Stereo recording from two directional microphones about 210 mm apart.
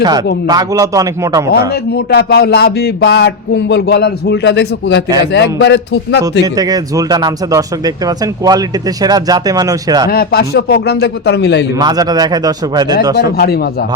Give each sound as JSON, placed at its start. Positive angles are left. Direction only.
{"t": 0.4, "sound": "speech", "side_deg": -15}
{"t": 1.5, "sound": "a man's voice", "side_deg": 50}
{"t": 6.4, "sound": "speech", "side_deg": -20}
{"t": 10.1, "sound": "a man's voice", "side_deg": 45}
{"t": 11.8, "sound": "a man's voice", "side_deg": -20}
{"t": 13.1, "sound": "a man's voice", "side_deg": 50}